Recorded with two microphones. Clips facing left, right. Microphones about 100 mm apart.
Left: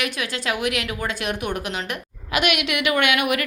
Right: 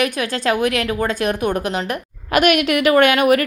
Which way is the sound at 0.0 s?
45° right (ahead or behind).